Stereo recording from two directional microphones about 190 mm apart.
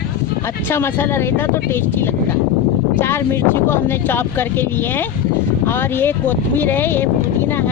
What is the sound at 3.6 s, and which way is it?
Speech, 10° left (ahead or behind).